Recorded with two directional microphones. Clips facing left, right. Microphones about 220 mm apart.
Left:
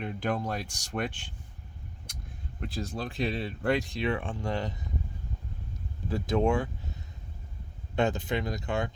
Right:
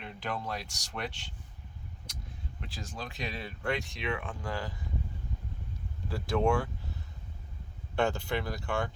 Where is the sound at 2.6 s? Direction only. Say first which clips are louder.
Left 8 dB; 35° left (ahead or behind).